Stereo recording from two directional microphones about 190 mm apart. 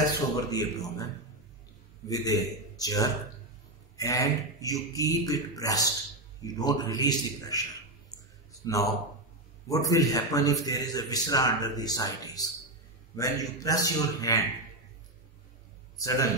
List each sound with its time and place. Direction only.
0.4 s a man's voice: 20° left (ahead or behind)
2.0 s a man's voice: 20° left (ahead or behind)
16.0 s speech: 15° left (ahead or behind)